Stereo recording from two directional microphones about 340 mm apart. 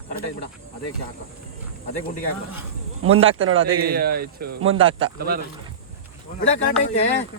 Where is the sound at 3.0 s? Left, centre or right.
Right.